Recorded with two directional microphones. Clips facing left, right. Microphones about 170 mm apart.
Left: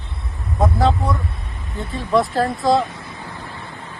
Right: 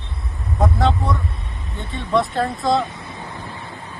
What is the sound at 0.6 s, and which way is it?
Speech, centre (ahead or behind).